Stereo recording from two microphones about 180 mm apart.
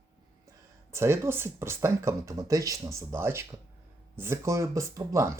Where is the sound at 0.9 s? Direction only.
15° right (ahead or behind).